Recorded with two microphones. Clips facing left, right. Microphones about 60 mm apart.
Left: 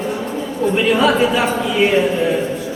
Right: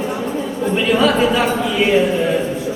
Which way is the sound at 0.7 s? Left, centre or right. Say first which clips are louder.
Even; centre.